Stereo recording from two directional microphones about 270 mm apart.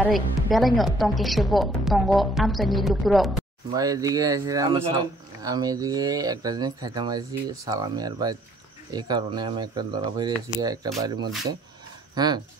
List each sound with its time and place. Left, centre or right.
0.0 s a woman's voice: centre
3.7 s speech: centre